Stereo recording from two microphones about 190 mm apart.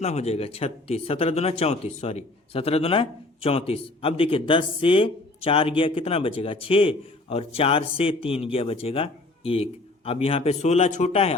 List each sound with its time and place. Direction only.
0.0 s speech: 35° left (ahead or behind)